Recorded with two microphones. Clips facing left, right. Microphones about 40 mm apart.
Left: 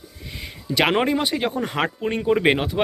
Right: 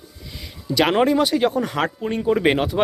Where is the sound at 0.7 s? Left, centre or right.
Left.